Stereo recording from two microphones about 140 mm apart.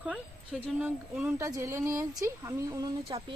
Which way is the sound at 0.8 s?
10° right (ahead or behind).